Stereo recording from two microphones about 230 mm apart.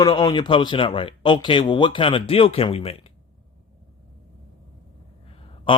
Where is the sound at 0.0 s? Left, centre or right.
Centre.